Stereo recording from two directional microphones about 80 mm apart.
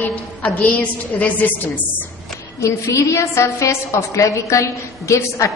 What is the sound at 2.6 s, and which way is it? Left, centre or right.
A woman's voice, left.